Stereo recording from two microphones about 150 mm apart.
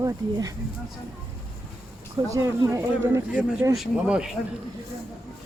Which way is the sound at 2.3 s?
20° right (ahead or behind).